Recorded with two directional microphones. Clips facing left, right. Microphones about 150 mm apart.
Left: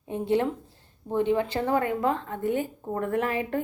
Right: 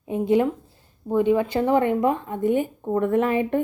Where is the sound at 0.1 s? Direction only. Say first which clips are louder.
Right 5 dB; 15° right (ahead or behind).